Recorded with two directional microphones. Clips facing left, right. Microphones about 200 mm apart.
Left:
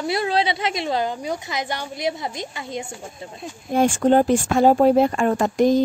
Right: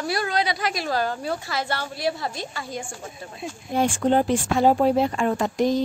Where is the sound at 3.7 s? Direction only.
45° left (ahead or behind).